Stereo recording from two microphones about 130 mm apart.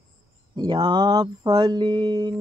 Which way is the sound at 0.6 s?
35° right (ahead or behind).